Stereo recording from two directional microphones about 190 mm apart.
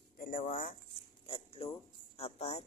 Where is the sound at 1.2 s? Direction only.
30° left (ahead or behind).